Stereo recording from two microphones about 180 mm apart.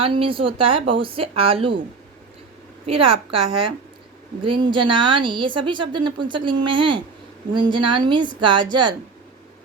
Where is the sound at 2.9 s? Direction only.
30° right (ahead or behind).